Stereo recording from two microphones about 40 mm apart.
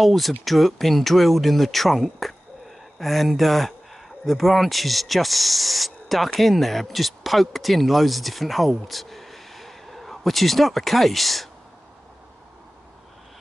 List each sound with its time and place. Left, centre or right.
0.0 s speech: centre